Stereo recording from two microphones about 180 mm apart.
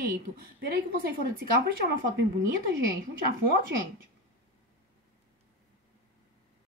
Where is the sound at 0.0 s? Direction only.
55° right (ahead or behind).